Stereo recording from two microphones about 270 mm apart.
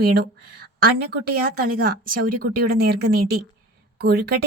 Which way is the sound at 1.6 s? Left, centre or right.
Right.